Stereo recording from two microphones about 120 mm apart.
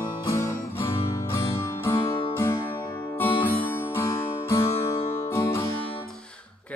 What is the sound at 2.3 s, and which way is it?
Music, 20° left (ahead or behind).